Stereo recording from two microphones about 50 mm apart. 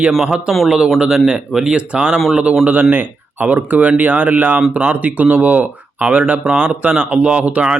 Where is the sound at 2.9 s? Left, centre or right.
Right.